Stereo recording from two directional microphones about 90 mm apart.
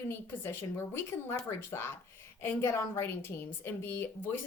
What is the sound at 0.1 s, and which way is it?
A woman's voice, 25° left (ahead or behind).